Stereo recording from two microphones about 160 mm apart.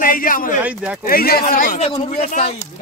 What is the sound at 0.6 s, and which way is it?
Speech, 10° right (ahead or behind).